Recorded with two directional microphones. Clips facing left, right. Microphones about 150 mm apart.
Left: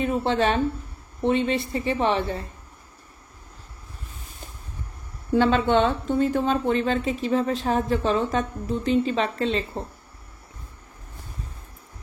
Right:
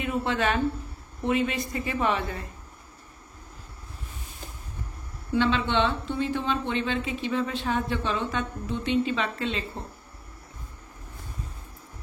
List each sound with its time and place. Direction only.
0.0 s a woman's voice: 35° left (ahead or behind)
5.3 s speech: 45° left (ahead or behind)